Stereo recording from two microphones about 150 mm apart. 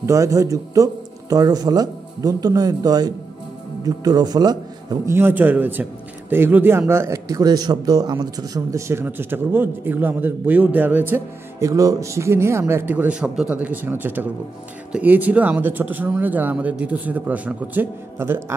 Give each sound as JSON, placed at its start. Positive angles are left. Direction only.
{"t": 0.0, "sound": "speech", "side_deg": -20}
{"t": 5.1, "sound": "a man's voice", "side_deg": -15}